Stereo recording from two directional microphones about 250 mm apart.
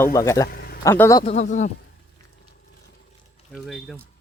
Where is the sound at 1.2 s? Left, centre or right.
Left.